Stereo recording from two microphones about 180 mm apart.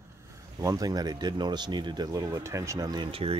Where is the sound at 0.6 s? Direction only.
20° right (ahead or behind).